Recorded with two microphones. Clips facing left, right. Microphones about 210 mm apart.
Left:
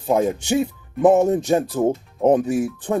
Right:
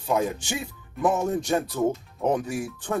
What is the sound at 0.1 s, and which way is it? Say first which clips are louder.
Speech: left 7 dB; 45° left (ahead or behind).